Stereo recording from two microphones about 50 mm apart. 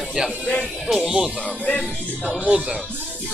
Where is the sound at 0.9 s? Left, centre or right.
Centre.